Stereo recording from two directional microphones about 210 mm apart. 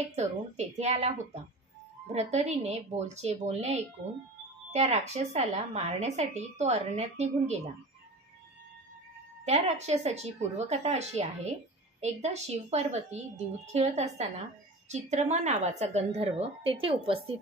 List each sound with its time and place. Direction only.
0.1 s a woman's voice: 30° right (ahead or behind)
9.4 s a woman's voice: 30° right (ahead or behind)